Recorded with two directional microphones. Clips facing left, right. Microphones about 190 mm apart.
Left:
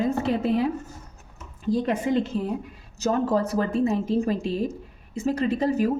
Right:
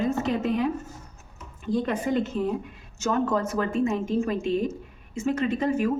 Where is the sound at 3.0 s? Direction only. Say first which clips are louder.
Left 2 dB; 35° left (ahead or behind).